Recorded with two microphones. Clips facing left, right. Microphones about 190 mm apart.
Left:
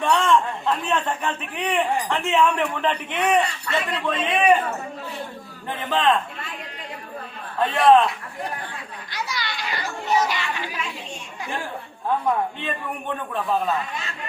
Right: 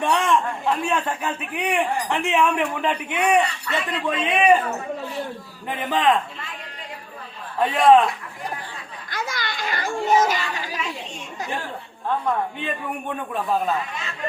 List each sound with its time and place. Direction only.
0.0 s a man's voice: 15° right (ahead or behind)
5.7 s a man's voice: 15° right (ahead or behind)
7.6 s a man's voice: 15° right (ahead or behind)
9.0 s children playing: 50° right (ahead or behind)